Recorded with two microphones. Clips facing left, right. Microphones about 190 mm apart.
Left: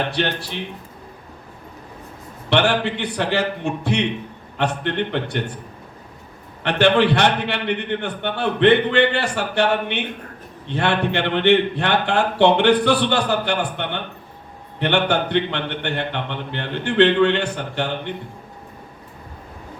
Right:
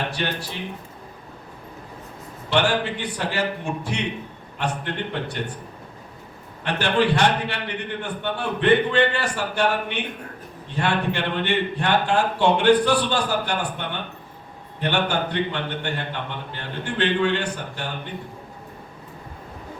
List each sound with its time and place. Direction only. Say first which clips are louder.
0.1 s a man's voice: left 4 dB; 65° left (ahead or behind)
2.5 s a man's voice: left 3 dB; 65° left (ahead or behind)
6.6 s a man's voice: left 5 dB; 70° left (ahead or behind)